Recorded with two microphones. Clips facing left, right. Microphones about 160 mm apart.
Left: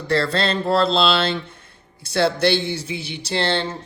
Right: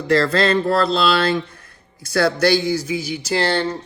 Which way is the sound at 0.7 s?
25° left (ahead or behind).